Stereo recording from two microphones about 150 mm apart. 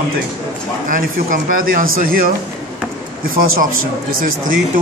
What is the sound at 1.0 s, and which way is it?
Speech, 70° right (ahead or behind).